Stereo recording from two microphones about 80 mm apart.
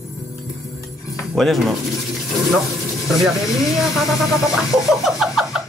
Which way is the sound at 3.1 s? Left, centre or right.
Centre.